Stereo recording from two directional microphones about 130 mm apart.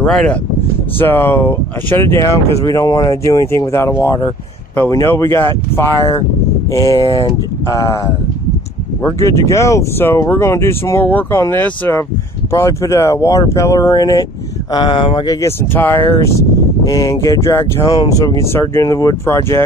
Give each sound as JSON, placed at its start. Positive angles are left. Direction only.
{"t": 0.0, "sound": "speech", "side_deg": 10}
{"t": 9.0, "sound": "speech", "side_deg": 25}
{"t": 12.4, "sound": "speech", "side_deg": 25}
{"t": 15.4, "sound": "speech", "side_deg": 20}